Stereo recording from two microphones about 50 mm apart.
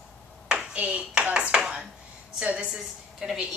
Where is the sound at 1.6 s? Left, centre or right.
Centre.